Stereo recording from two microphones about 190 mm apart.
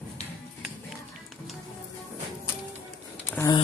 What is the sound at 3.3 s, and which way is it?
Speech, 20° left (ahead or behind).